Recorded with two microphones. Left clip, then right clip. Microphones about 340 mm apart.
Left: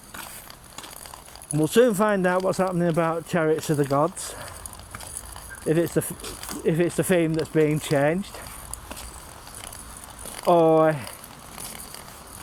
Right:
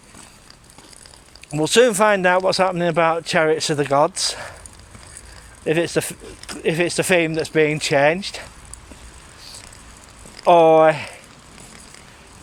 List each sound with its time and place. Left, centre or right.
1.5 s speech: right
5.6 s speech: right
10.4 s speech: right